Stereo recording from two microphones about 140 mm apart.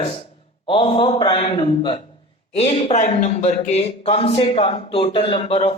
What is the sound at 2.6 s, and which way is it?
Speech, 50° left (ahead or behind).